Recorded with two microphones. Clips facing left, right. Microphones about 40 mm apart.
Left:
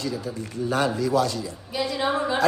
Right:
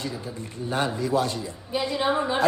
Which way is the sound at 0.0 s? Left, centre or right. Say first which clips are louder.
Left 3 dB; right.